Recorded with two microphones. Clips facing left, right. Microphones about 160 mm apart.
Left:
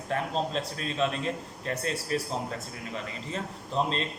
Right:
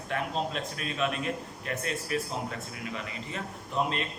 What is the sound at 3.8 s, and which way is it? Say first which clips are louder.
Speech: left 1 dB; 30° left (ahead or behind).